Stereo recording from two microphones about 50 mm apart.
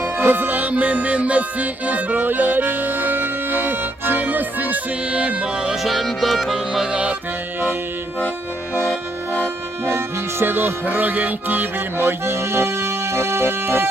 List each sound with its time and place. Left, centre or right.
0.0 s music: right
5.8 s music: centre
6.9 s music: right
10.4 s music: right